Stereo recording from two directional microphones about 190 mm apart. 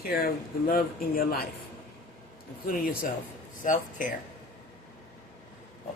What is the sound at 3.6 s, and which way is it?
Speech, 45° left (ahead or behind).